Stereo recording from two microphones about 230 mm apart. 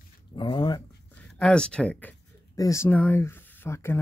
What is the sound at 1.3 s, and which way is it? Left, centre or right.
Speech, centre.